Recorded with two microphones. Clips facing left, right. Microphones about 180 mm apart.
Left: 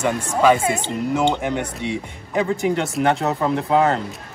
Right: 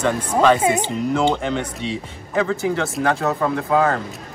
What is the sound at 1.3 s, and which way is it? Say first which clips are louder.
Speech: even; 10° left (ahead or behind).